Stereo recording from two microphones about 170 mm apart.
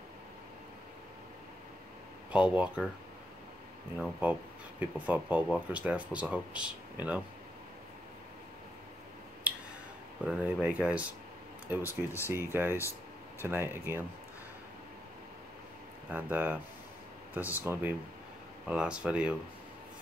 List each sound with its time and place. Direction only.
2.3 s speech: 5° right (ahead or behind)
4.0 s speech: 10° right (ahead or behind)
10.2 s speech: 10° right (ahead or behind)
11.8 s speech: 15° left (ahead or behind)
12.5 s speech: 10° right (ahead or behind)
16.1 s speech: 10° right (ahead or behind)